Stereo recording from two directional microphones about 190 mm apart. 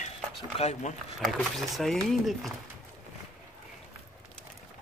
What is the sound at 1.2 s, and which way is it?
Speech, centre (ahead or behind).